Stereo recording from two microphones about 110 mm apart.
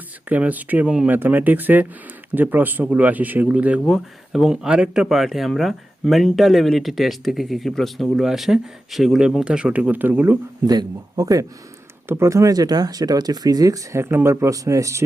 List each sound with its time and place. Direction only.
0.3 s speech: 15° right (ahead or behind)
3.8 s speech: centre (ahead or behind); by 10.3 s 15° right (ahead or behind)
10.7 s speech: 35° right (ahead or behind)